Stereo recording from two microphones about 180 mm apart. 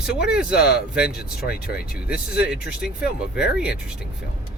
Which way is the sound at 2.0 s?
5° right (ahead or behind).